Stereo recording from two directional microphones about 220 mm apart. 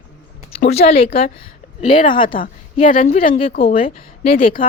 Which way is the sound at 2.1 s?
20° left (ahead or behind).